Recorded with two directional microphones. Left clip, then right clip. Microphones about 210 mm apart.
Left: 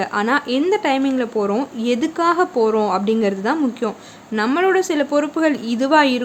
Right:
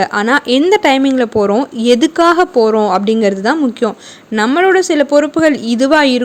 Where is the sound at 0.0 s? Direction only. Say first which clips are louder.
Right 6 dB; 25° right (ahead or behind).